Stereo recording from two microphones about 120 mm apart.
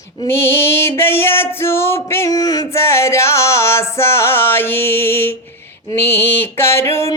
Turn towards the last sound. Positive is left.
turn(degrees=20)  # may be behind; listen again after turning